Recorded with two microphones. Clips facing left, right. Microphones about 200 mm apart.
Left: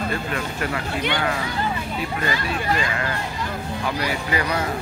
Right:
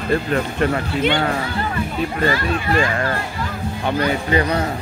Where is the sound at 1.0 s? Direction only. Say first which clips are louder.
Right 5 dB; 25° right (ahead or behind).